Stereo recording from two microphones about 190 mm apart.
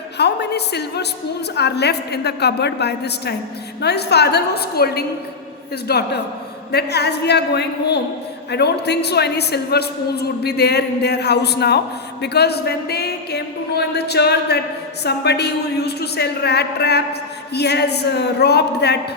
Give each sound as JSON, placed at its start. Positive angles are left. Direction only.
{"t": 0.2, "sound": "speech", "side_deg": 60}